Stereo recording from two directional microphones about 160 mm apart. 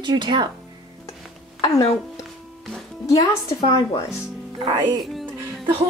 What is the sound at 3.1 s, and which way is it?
Speech, 25° left (ahead or behind).